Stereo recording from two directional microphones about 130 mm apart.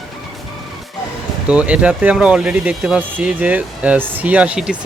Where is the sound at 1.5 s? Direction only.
10° right (ahead or behind).